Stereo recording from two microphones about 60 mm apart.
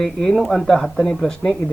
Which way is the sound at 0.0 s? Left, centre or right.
Centre.